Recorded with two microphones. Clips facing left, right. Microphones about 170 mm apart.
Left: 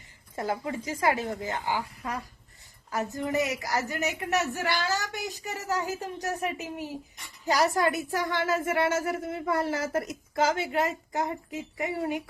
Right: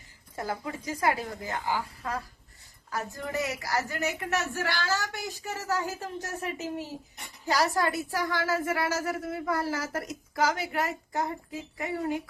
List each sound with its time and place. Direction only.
0.3 s a woman's voice: 25° left (ahead or behind)